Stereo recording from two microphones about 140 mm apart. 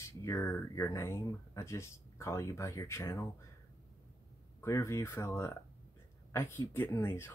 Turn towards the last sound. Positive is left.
turn(degrees=20)  # may be behind; listen again after turning